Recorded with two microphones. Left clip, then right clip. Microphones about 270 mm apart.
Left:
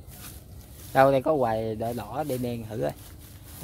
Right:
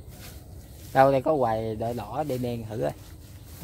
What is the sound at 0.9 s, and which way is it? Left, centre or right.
Speech, centre.